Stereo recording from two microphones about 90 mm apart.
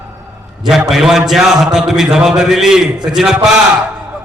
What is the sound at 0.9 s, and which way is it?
Speech, 5° right (ahead or behind).